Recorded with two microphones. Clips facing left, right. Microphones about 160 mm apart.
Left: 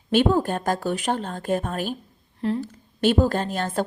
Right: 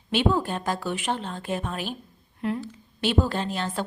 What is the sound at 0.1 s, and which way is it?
Speech, 45° left (ahead or behind).